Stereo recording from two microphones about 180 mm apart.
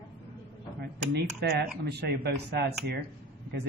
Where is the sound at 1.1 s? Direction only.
65° right (ahead or behind).